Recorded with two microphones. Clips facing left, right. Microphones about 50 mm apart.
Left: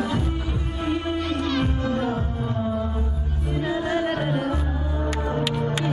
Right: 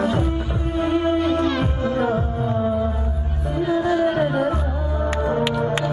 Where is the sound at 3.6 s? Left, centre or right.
Left.